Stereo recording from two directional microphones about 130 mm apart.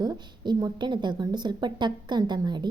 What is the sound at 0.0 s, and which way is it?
A woman's voice, 30° right (ahead or behind).